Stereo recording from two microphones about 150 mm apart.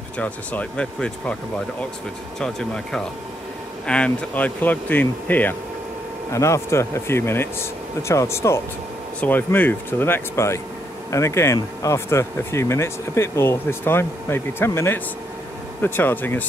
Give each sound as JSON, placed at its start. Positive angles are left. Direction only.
{"t": 0.2, "sound": "speech", "side_deg": 10}